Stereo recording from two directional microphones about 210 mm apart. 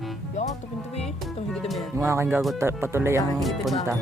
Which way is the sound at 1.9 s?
15° right (ahead or behind).